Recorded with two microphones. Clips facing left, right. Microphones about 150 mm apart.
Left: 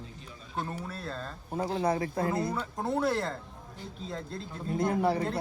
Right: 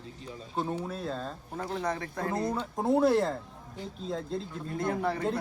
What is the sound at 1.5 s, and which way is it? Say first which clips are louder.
Speech: left 5 dB; 30° left (ahead or behind).